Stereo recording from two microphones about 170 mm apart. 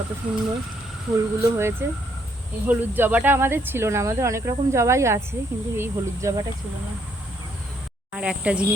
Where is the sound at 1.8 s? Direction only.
15° right (ahead or behind).